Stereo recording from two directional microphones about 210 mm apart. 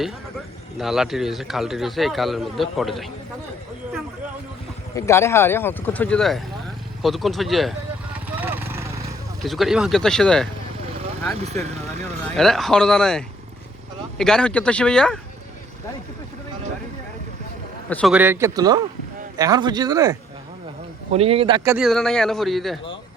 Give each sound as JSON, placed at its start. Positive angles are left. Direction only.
{"t": 0.8, "sound": "speech", "side_deg": 0}
{"t": 4.9, "sound": "speech", "side_deg": 15}
{"t": 8.3, "sound": "vehicle", "side_deg": -10}
{"t": 9.4, "sound": "speech", "side_deg": 0}
{"t": 11.3, "sound": "speech", "side_deg": -30}
{"t": 12.4, "sound": "speech", "side_deg": 0}
{"t": 17.8, "sound": "a man's voice", "side_deg": 5}
{"t": 18.1, "sound": "speech", "side_deg": -10}
{"t": 21.1, "sound": "a man's voice", "side_deg": -30}
{"t": 21.6, "sound": "speech", "side_deg": -10}
{"t": 21.8, "sound": "speech", "side_deg": 0}